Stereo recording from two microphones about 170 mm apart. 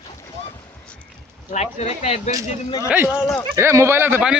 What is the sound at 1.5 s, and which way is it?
Speech, 40° left (ahead or behind).